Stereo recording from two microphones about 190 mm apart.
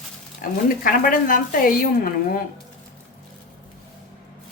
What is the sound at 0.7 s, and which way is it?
A woman's voice, 45° left (ahead or behind).